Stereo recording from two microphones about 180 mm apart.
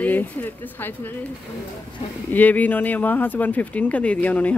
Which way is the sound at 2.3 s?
10° left (ahead or behind).